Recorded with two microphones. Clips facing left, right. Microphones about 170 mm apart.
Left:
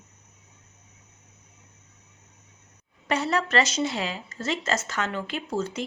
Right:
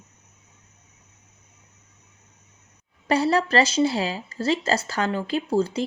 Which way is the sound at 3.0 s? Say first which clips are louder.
Right 5 dB; 35° right (ahead or behind).